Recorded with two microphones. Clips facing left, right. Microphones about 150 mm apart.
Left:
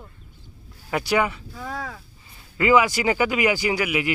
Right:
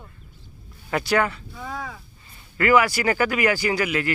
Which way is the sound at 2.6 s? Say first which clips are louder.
Even; 20° left (ahead or behind).